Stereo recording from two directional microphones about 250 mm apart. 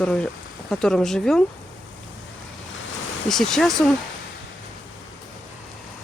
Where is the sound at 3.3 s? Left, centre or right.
Centre.